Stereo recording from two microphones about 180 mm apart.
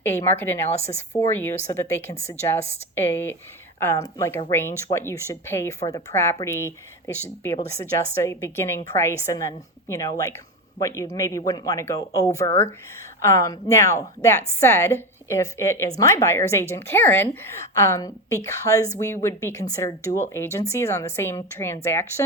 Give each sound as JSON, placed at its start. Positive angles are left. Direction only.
{"t": 0.2, "sound": "a woman's voice", "side_deg": 15}
{"t": 0.7, "sound": "speech", "side_deg": 35}
{"t": 1.2, "sound": "a woman's voice", "side_deg": 15}
{"t": 2.1, "sound": "speech", "side_deg": 40}
{"t": 2.9, "sound": "a woman's voice", "side_deg": 10}
{"t": 8.2, "sound": "a woman's voice", "side_deg": 15}